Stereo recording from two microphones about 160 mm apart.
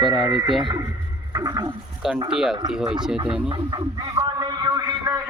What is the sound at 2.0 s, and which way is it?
Speech, 5° right (ahead or behind).